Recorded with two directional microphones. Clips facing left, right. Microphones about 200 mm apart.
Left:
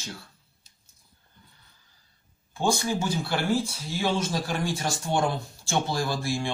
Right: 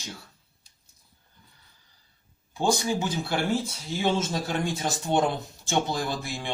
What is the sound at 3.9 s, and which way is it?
Speech, 20° right (ahead or behind).